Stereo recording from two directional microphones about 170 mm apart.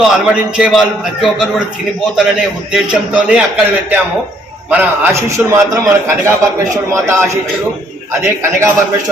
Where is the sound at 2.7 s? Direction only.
5° right (ahead or behind).